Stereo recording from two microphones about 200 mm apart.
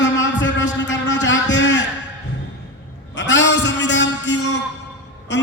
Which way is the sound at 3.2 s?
65° left (ahead or behind).